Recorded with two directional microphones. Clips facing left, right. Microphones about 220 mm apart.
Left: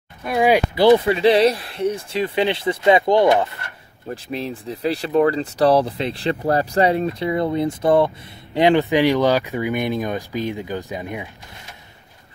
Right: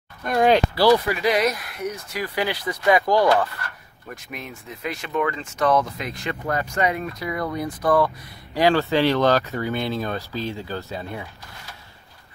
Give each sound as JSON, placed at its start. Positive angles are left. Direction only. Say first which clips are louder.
{"t": 0.2, "sound": "speech", "louder": "left 1 dB", "side_deg": 5}
{"t": 0.7, "sound": "speech", "louder": "left 4 dB", "side_deg": 25}